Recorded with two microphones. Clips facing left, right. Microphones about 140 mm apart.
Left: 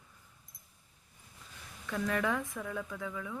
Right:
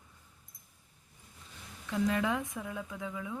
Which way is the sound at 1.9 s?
20° right (ahead or behind).